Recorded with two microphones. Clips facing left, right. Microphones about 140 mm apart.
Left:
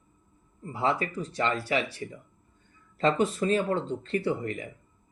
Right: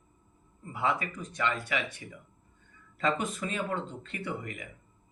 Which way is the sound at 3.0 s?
30° left (ahead or behind).